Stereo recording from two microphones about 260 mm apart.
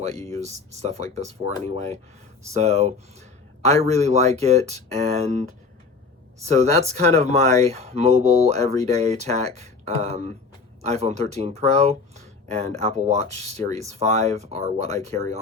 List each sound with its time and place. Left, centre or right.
0.3 s speech: right